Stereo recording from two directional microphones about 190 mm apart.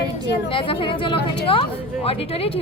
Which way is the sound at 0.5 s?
25° left (ahead or behind).